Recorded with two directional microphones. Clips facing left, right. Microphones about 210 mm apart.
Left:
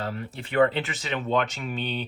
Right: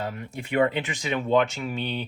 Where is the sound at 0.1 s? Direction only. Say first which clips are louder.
Left 1 dB; 35° left (ahead or behind).